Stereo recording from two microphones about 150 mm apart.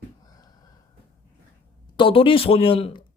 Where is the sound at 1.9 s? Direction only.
35° left (ahead or behind).